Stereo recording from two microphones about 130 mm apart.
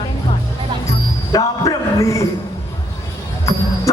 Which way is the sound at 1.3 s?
25° left (ahead or behind).